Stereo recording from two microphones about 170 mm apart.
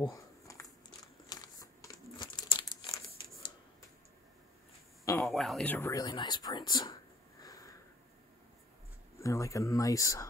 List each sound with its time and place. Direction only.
0.0 s crumpling: 20° left (ahead or behind)
5.2 s speech: centre (ahead or behind); by 7.0 s 25° left (ahead or behind)
7.4 s sniff: 20° left (ahead or behind)
9.2 s speech: 20° left (ahead or behind)